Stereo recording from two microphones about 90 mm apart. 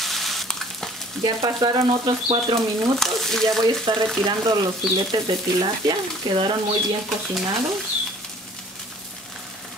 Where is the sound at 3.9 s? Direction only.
65° right (ahead or behind).